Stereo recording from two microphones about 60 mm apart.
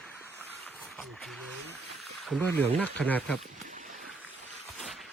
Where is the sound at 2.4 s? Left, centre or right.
Left.